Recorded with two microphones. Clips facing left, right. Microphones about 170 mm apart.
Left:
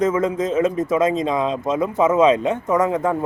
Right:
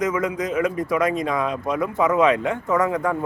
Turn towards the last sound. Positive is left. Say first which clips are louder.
# left 2 dB
turn(degrees=20)  # may be behind; listen again after turning